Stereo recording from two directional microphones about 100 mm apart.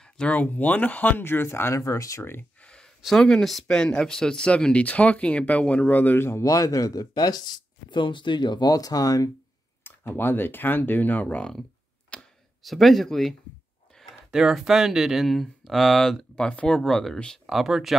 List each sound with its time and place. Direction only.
0.0 s speech: 10° left (ahead or behind); by 2.4 s 25° left (ahead or behind)
2.6 s a sound: 10° left (ahead or behind)
3.0 s speech: 5° left (ahead or behind); by 9.3 s 40° left (ahead or behind)
9.8 s speech: 20° left (ahead or behind)
12.1 s a sound: centre (ahead or behind)
13.9 s speech: 5° right (ahead or behind)